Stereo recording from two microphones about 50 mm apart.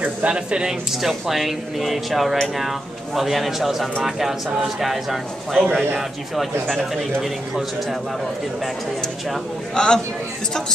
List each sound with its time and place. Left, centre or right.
0.0 s speech: right
1.0 s speech: centre
9.8 s speech: centre